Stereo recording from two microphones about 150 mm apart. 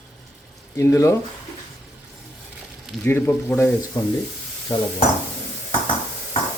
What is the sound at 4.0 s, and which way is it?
Speech, 25° left (ahead or behind).